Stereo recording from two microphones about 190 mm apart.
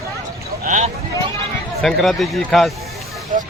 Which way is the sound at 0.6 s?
40° right (ahead or behind).